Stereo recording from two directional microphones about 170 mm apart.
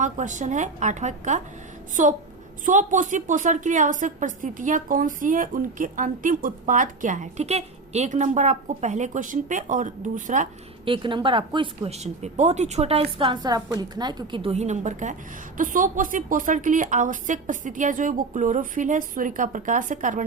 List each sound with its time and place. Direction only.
0.0 s a woman's voice: 45° right (ahead or behind)
10.8 s a woman's voice: 30° right (ahead or behind); by 20.2 s 50° right (ahead or behind)